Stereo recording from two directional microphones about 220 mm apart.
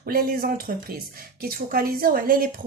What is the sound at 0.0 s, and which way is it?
Speech, 40° right (ahead or behind).